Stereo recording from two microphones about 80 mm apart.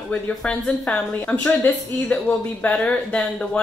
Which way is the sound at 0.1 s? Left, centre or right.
Centre.